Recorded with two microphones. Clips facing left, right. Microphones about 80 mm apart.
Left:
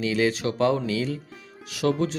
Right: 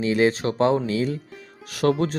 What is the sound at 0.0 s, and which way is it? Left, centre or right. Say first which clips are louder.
Speech: right 3 dB; right.